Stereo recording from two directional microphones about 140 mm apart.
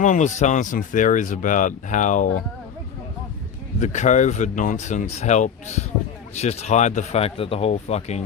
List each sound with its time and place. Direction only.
0.0 s speech: 60° left (ahead or behind)
3.8 s speech: 60° left (ahead or behind)